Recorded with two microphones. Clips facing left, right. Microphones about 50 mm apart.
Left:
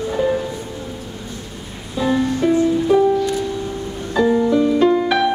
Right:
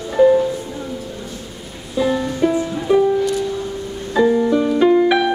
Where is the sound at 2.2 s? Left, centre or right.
Centre.